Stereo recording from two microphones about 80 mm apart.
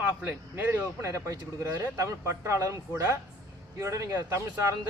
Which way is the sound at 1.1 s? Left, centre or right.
Right.